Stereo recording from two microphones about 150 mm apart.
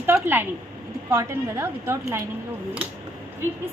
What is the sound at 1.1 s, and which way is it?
A woman's voice, 15° right (ahead or behind).